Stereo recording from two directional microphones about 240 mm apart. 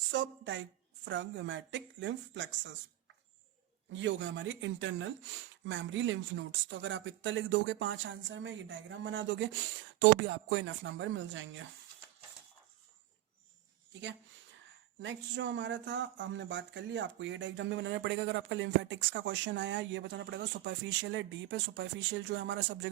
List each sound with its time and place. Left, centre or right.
0.1 s speech: right
3.9 s speech: right
13.9 s speech: right